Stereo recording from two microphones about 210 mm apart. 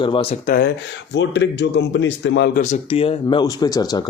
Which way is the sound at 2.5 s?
35° left (ahead or behind).